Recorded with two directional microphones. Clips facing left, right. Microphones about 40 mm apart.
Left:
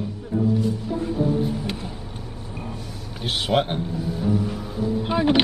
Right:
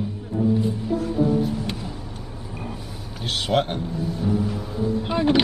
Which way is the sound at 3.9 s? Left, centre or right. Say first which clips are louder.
Even; centre.